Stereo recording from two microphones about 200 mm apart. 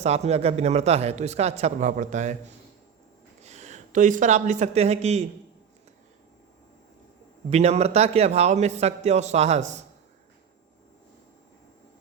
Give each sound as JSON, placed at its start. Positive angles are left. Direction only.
{"t": 0.0, "sound": "a man's voice", "side_deg": -30}
{"t": 7.5, "sound": "a man's voice", "side_deg": -35}